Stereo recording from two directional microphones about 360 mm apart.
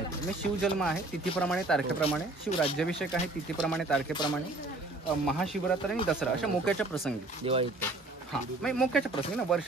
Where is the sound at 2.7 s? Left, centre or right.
Centre.